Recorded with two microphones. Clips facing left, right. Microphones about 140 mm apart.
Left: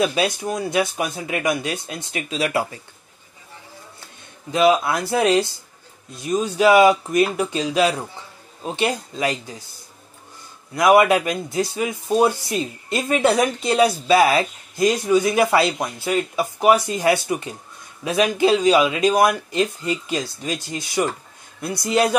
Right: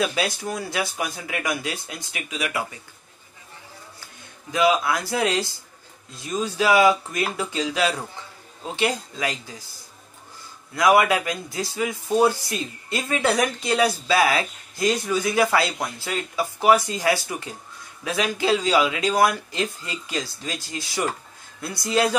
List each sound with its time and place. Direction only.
0.0 s speech: 20° left (ahead or behind)
4.0 s speech: 25° left (ahead or behind)
10.7 s speech: 20° left (ahead or behind)